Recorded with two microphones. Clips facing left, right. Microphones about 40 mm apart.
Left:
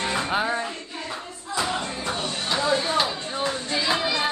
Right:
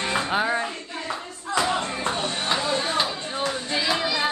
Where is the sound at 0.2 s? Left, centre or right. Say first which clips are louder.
Right 1 dB; centre.